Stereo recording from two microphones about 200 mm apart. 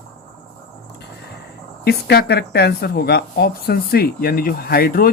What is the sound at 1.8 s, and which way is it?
Speech, 55° left (ahead or behind).